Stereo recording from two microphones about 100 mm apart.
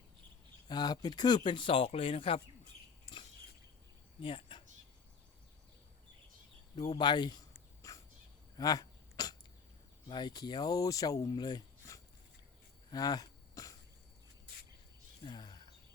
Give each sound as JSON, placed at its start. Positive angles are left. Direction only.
{"t": 0.7, "sound": "speech", "side_deg": 45}
{"t": 4.2, "sound": "speech", "side_deg": 60}
{"t": 6.7, "sound": "speech", "side_deg": 45}
{"t": 7.5, "sound": "a sound", "side_deg": 35}
{"t": 8.5, "sound": "cough", "side_deg": 40}
{"t": 10.1, "sound": "speech", "side_deg": 45}
{"t": 12.9, "sound": "throat clearing", "side_deg": 40}
{"t": 15.2, "sound": "a sound", "side_deg": 45}